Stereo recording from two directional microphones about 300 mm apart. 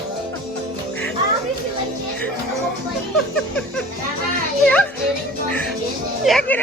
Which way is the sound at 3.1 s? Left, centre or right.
Centre.